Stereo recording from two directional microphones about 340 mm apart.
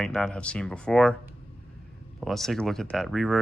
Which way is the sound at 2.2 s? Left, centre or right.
Centre.